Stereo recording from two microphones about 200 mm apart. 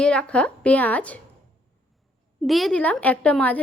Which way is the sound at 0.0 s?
5° left (ahead or behind).